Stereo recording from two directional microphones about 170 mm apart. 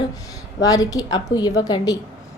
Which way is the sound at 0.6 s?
20° left (ahead or behind).